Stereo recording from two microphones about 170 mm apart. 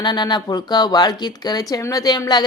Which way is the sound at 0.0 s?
25° left (ahead or behind).